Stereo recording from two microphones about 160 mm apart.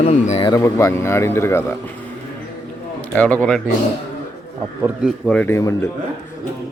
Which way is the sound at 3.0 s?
10° left (ahead or behind).